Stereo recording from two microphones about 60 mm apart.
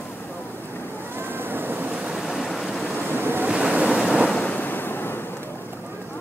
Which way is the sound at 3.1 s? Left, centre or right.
Right.